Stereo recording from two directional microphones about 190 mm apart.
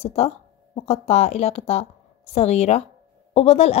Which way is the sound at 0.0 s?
35° left (ahead or behind).